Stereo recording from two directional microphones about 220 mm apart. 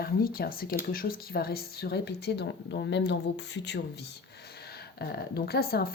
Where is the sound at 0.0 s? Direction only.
45° left (ahead or behind).